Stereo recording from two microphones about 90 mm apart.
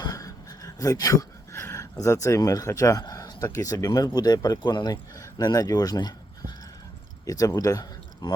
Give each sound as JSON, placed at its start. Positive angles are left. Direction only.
{"t": 0.0, "sound": "a sound", "side_deg": 40}
{"t": 1.6, "sound": "speech", "side_deg": 35}
{"t": 8.2, "sound": "speech", "side_deg": 55}